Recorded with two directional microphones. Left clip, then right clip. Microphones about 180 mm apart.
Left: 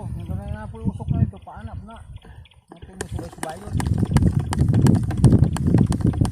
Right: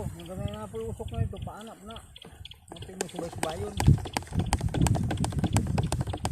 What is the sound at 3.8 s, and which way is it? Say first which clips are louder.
Speech: left 8 dB; 5° left (ahead or behind).